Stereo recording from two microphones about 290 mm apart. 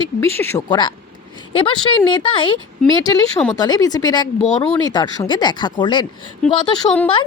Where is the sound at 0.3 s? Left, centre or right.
Centre.